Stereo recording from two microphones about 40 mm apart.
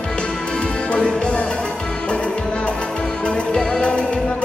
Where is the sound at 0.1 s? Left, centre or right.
Left.